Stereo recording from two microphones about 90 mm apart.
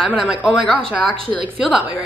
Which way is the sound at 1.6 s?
15° right (ahead or behind).